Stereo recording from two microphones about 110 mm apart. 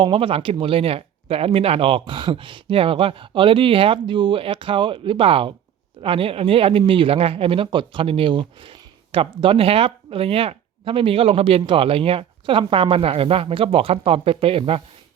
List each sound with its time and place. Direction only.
0.0 s speech: 55° right (ahead or behind)